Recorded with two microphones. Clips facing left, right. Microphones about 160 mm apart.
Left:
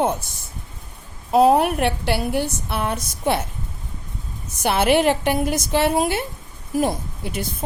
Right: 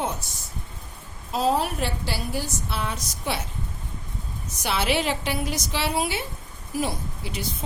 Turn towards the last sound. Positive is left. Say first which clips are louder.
# left 4 dB
turn(degrees=50)  # may be behind; listen again after turning